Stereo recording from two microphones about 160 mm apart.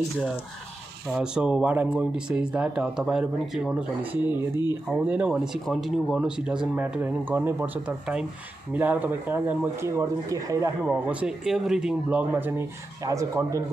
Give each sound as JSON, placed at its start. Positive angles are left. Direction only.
{"t": 1.0, "sound": "speech", "side_deg": -5}
{"t": 10.8, "sound": "speech", "side_deg": -10}